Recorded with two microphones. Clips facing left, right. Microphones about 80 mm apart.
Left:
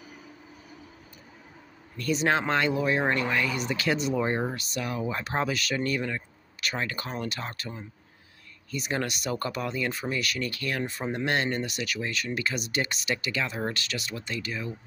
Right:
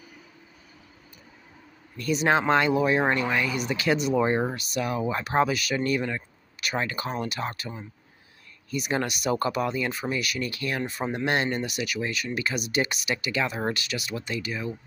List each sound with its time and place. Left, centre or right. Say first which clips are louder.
2.0 s speech: right 2 dB; centre
4.2 s speech: right 4 dB; right
4.6 s speech: right 4 dB; centre